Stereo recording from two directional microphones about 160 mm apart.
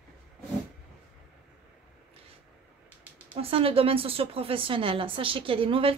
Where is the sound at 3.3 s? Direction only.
35° right (ahead or behind).